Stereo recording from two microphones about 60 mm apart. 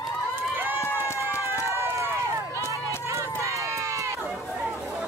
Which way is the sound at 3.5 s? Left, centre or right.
Right.